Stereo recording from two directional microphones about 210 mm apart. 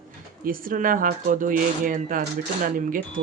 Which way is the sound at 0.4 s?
40° right (ahead or behind).